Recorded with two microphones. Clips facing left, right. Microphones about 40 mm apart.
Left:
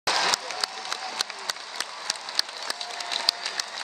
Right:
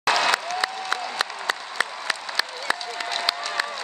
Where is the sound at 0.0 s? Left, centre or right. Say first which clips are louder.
Right 4 dB; right.